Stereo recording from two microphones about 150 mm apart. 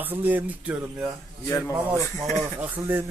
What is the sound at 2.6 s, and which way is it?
Speech, 15° right (ahead or behind).